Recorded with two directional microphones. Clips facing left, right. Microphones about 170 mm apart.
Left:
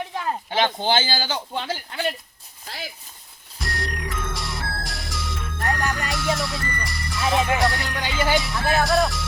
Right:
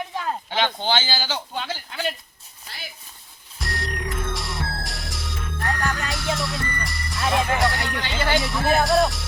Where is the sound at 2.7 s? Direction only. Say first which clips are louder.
Left 7 dB; 90° left.